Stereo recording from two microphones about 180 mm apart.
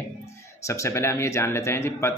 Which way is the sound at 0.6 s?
15° left (ahead or behind).